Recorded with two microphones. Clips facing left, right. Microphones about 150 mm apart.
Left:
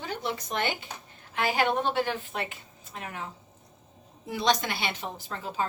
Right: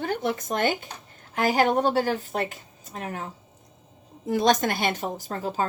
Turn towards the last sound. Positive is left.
turn(degrees=-40)  # may be behind; listen again after turning